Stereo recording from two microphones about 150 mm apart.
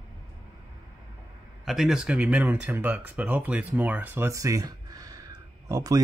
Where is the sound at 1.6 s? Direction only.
Centre (ahead or behind).